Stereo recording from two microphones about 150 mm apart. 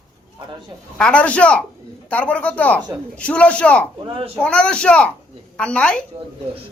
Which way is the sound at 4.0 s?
40° right (ahead or behind).